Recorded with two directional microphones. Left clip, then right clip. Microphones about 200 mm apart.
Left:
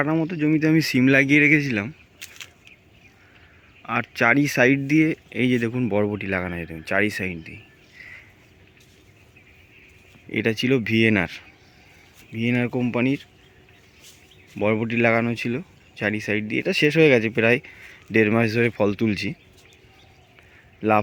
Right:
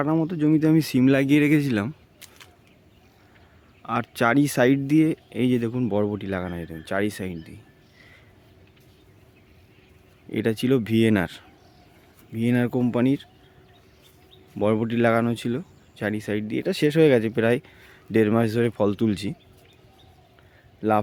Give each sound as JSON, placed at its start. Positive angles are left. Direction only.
{"t": 0.0, "sound": "speech", "side_deg": -10}
{"t": 2.2, "sound": "a sound", "side_deg": 5}
{"t": 3.8, "sound": "speech", "side_deg": -15}
{"t": 10.2, "sound": "speech", "side_deg": -10}
{"t": 14.6, "sound": "speech", "side_deg": -15}